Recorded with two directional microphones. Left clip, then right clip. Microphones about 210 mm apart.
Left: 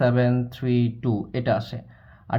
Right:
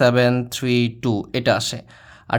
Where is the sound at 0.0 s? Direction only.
35° right (ahead or behind).